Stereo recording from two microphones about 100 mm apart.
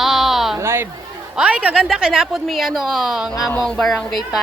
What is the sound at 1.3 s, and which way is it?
A woman's voice, 10° right (ahead or behind).